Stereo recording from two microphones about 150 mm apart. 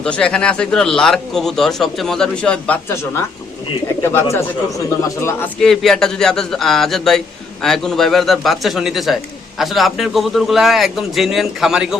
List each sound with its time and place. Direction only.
0.0 s speech: 5° left (ahead or behind)
5.5 s speech: centre (ahead or behind)